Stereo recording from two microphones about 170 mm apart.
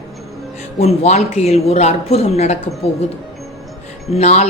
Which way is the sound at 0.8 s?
40° left (ahead or behind).